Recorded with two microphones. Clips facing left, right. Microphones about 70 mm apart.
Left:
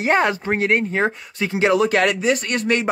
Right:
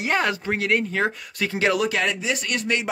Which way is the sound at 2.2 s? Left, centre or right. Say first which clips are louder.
Left 6 dB; left.